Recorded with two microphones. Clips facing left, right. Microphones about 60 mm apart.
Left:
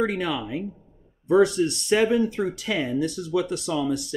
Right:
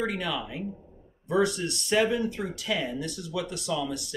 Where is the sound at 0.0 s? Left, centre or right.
Left.